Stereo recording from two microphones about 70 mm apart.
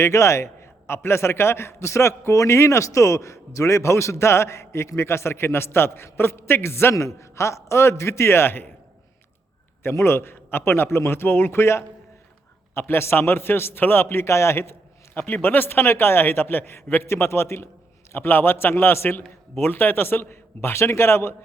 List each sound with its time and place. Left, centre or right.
0.0 s a man's voice: left
9.8 s a man's voice: left